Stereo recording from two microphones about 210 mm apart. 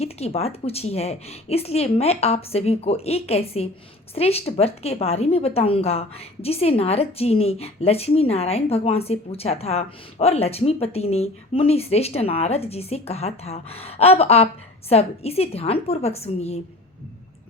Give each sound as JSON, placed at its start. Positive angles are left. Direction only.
{"t": 0.0, "sound": "a woman's voice", "side_deg": 30}